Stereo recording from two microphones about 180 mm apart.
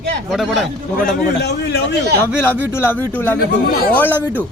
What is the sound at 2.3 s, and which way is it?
Speech, 10° right (ahead or behind).